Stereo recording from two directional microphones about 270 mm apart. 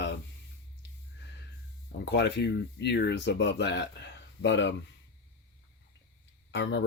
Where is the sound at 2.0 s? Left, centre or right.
Left.